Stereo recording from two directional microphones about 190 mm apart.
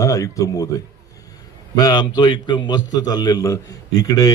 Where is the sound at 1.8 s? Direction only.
20° left (ahead or behind).